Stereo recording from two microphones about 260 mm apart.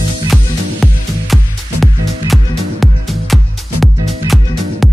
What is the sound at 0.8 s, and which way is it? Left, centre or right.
Music, centre.